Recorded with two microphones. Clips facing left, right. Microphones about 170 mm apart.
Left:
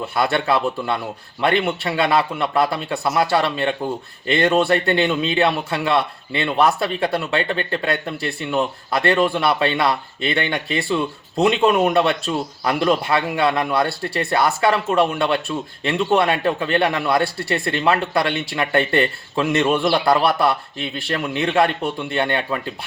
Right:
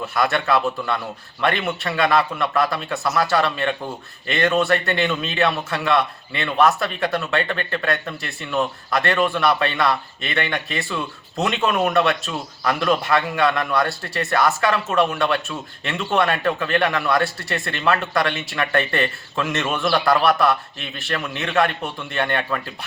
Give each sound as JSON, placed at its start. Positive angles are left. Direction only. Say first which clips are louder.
{"t": 0.1, "sound": "speech", "louder": "even", "side_deg": 30}